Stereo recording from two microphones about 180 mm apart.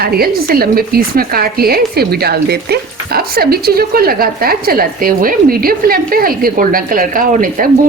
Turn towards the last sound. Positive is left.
turn(degrees=-50)  # may be behind; listen again after turning